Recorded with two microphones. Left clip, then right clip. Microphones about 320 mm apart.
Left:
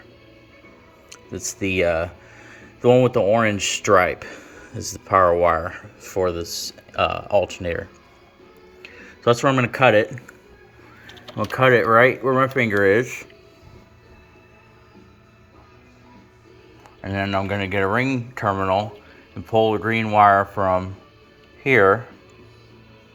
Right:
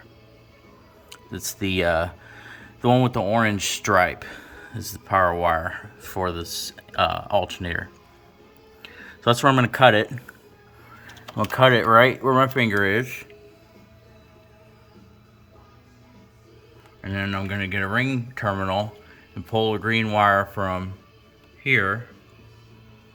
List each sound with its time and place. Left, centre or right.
1.1 s speech: centre
11.3 s speech: centre
17.0 s speech: centre